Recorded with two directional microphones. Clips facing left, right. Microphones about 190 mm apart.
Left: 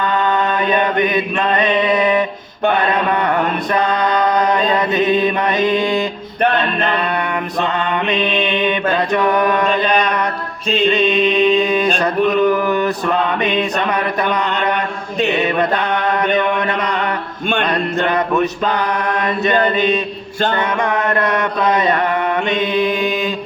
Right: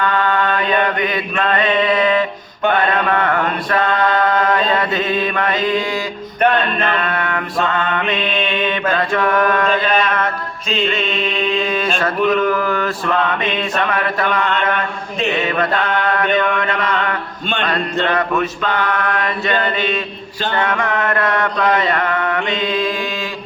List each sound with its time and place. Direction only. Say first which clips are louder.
0.2 s chant: left 1 dB; 20° left (ahead or behind)
2.9 s mantra: left 1 dB; 20° left (ahead or behind)
18.8 s mantra: left 1 dB; 20° left (ahead or behind)